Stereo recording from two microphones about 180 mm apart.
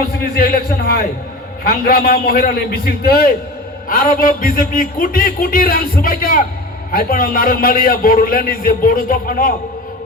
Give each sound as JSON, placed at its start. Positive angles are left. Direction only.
{"t": 0.0, "sound": "a man's voice", "side_deg": 55}